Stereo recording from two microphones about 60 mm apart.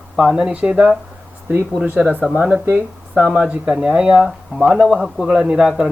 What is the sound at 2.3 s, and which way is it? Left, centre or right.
Speech, centre.